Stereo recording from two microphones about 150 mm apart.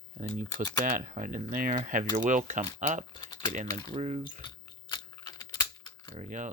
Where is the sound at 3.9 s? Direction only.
50° right (ahead or behind).